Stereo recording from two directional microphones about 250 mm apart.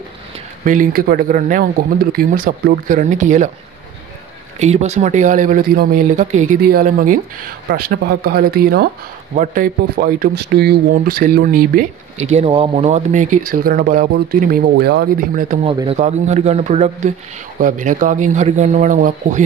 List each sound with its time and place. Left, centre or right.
0.7 s speech: right
4.6 s speech: right
15.6 s speech: centre